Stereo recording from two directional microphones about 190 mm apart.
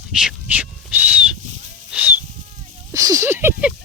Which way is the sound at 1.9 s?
10° right (ahead or behind).